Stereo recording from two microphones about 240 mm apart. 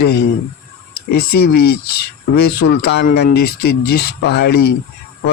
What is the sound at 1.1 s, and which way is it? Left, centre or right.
Speech, left.